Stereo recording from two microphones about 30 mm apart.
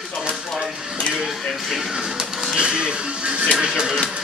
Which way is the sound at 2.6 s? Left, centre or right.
Right.